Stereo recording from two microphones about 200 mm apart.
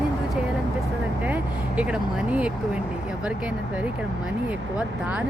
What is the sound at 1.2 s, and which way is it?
Vehicle, 5° right (ahead or behind).